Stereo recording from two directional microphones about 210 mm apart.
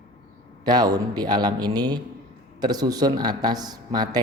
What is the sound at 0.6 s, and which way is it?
Speech, 20° right (ahead or behind).